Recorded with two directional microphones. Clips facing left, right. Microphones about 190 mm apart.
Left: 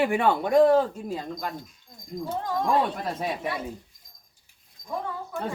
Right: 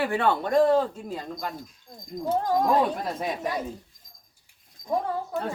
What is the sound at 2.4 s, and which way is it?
Speech, 40° right (ahead or behind).